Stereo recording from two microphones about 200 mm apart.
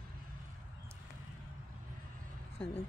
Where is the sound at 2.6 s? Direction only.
10° left (ahead or behind).